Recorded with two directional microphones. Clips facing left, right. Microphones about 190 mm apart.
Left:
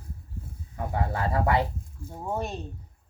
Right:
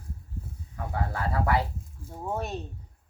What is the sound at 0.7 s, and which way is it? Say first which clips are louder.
Speech: left 3 dB; 25° left (ahead or behind).